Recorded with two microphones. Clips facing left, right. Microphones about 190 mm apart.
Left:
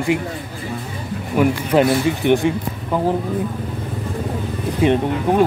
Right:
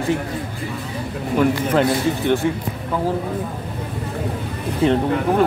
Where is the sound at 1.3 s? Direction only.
15° left (ahead or behind).